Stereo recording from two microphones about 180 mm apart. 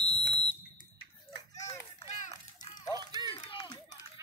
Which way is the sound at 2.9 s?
25° right (ahead or behind).